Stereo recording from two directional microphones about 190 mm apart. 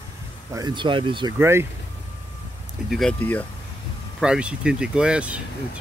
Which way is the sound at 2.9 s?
5° left (ahead or behind).